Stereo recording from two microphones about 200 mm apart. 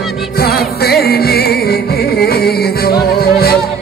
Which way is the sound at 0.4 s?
50° left (ahead or behind).